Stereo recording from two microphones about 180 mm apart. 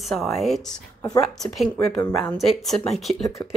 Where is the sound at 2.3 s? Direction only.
Centre (ahead or behind).